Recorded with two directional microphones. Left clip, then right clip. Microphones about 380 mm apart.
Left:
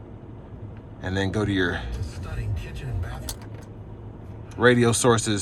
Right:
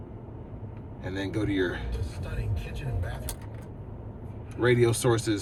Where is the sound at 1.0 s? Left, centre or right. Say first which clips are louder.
Left 5 dB; centre.